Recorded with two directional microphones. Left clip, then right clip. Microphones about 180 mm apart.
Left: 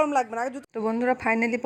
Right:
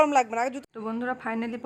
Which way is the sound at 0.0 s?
10° right (ahead or behind).